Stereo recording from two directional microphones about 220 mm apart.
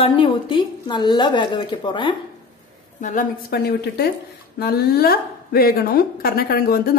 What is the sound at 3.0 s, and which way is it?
A woman's voice, 40° left (ahead or behind).